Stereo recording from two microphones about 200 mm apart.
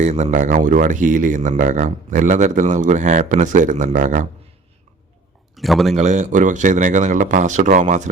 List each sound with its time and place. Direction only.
0.0 s speech: 35° right (ahead or behind)
5.5 s speech: centre (ahead or behind)
5.9 s speech: 35° right (ahead or behind)